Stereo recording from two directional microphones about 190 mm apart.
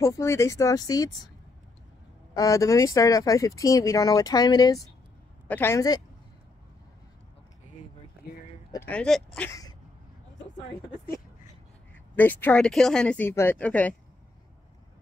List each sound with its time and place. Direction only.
0.0 s speech: 15° left (ahead or behind)
2.3 s speech: 15° left (ahead or behind)
8.2 s a sound: 55° left (ahead or behind)
8.7 s speech: 10° left (ahead or behind)
12.2 s speech: 10° left (ahead or behind)